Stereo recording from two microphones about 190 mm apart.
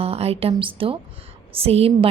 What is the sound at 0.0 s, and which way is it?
A woman's voice, 30° right (ahead or behind).